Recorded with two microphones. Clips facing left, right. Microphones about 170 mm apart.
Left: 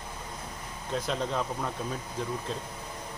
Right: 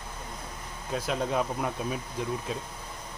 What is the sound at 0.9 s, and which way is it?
Speech, 5° right (ahead or behind).